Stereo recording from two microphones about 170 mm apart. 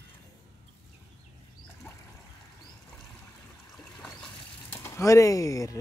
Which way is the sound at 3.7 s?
5° left (ahead or behind).